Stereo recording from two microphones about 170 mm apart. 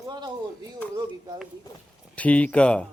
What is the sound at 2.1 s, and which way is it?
Speech, 10° left (ahead or behind).